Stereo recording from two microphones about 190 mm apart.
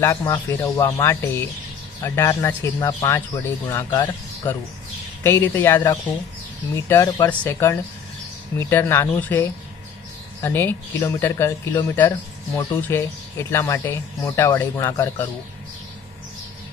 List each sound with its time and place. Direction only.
0.0 s speech: 15° left (ahead or behind)